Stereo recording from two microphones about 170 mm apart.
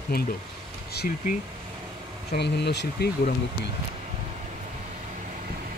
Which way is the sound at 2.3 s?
80° left.